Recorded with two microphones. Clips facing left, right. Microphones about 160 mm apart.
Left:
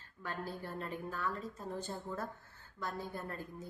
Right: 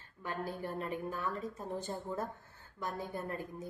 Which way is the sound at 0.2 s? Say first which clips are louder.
Right 3 dB; 15° right (ahead or behind).